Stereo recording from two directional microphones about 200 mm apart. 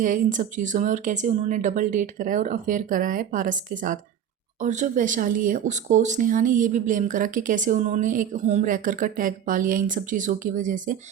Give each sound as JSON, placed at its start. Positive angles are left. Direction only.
{"t": 0.0, "sound": "speech", "side_deg": -40}